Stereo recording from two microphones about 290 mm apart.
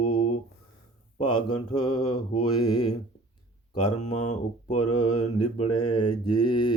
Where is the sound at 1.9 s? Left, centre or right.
Left.